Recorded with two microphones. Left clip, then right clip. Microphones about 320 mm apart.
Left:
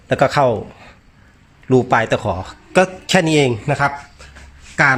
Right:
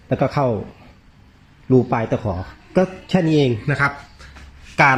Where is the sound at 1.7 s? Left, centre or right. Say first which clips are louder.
Left 4 dB; left.